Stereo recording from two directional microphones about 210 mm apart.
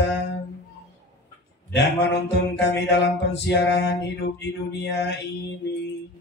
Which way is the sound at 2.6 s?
55° left (ahead or behind).